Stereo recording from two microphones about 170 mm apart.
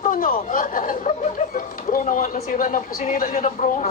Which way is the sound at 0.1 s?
55° left (ahead or behind).